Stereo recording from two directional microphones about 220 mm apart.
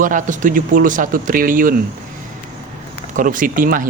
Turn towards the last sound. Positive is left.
turn(degrees=-40)  # may be behind; listen again after turning